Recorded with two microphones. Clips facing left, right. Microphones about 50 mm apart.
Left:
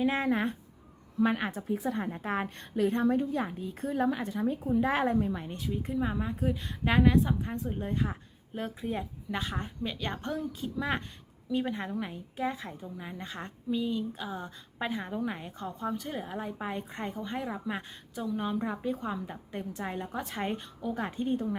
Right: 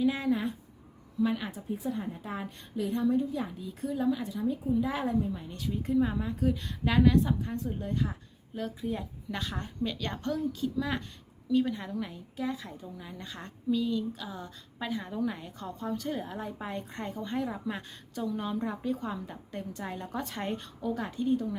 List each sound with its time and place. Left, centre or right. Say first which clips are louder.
0.0 s a woman's voice: even; left
1.6 s a woman's voice: left 2 dB; left
5.5 s a woman's voice: right 8 dB; centre
20.9 s a woman's voice: right 2 dB; left